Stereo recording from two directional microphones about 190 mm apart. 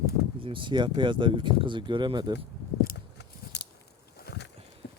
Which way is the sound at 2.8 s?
60° left (ahead or behind).